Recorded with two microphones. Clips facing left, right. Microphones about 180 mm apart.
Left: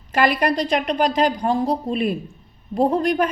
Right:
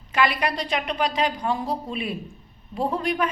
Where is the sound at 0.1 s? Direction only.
45° left (ahead or behind).